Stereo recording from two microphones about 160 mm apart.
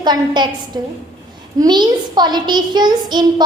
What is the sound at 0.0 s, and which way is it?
A woman's voice, 25° right (ahead or behind).